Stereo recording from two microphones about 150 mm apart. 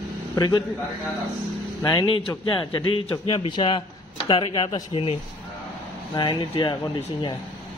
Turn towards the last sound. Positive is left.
turn(degrees=30)  # may be behind; listen again after turning